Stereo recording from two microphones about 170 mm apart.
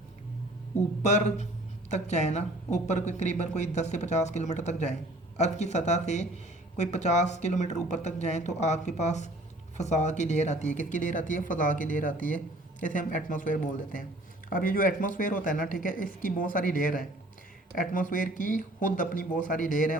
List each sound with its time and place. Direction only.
1.0 s speech: 40° left (ahead or behind)